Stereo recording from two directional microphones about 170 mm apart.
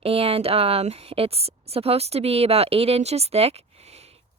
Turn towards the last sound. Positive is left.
turn(degrees=-40)  # may be behind; listen again after turning